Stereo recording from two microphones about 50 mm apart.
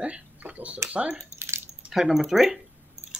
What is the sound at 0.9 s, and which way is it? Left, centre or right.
Speech, right.